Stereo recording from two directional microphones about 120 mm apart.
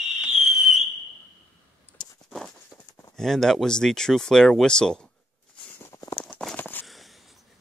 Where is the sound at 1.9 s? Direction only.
15° left (ahead or behind).